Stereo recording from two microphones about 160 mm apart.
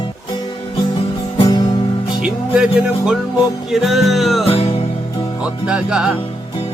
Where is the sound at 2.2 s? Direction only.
5° right (ahead or behind).